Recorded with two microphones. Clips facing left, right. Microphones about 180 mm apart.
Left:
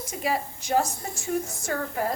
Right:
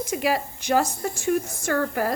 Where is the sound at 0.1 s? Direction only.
85° right.